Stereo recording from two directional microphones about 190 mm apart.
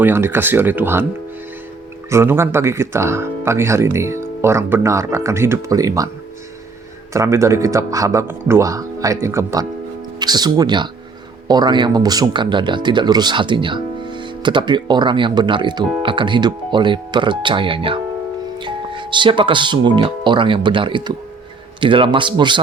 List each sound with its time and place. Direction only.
0.0 s speech: 10° right (ahead or behind)
2.0 s speech: 15° right (ahead or behind)
7.1 s speech: 15° right (ahead or behind)